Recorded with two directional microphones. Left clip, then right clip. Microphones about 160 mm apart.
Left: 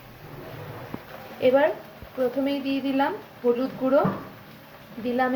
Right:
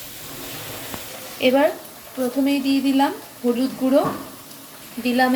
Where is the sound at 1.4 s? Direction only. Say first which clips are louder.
Right 2 dB; 5° right (ahead or behind).